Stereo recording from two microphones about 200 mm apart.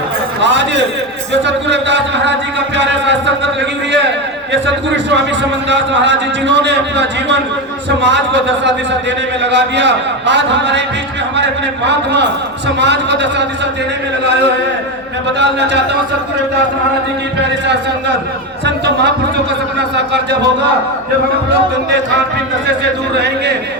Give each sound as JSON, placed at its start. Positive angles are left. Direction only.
{"t": 0.4, "sound": "a man's voice", "side_deg": -65}
{"t": 2.7, "sound": "a sound", "side_deg": -65}
{"t": 4.5, "sound": "a man's voice", "side_deg": -60}
{"t": 11.9, "sound": "a man's voice", "side_deg": -60}
{"t": 15.4, "sound": "a man's voice", "side_deg": -60}
{"t": 18.6, "sound": "a sound", "side_deg": -60}
{"t": 21.8, "sound": "a man's voice", "side_deg": -60}